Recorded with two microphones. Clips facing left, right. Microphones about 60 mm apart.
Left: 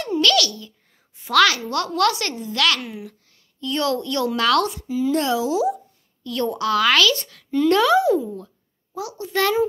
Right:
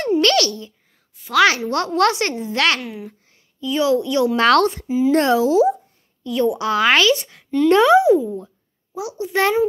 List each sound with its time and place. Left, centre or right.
0.0 s babbling: right
1.2 s a sound: left
1.7 s a woman's voice: right
2.8 s speech: centre
3.6 s a woman's voice: centre
4.4 s speech: right
4.8 s speech: right
5.1 s a woman's voice: right
6.2 s a woman's voice: centre
6.7 s speech: right